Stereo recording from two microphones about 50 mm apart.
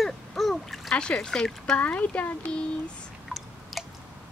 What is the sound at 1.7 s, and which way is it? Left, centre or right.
Speech, left.